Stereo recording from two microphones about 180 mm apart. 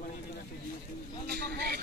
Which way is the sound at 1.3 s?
60° right (ahead or behind).